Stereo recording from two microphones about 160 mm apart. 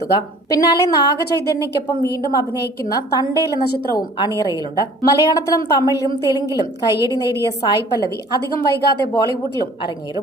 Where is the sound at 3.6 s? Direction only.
70° left (ahead or behind).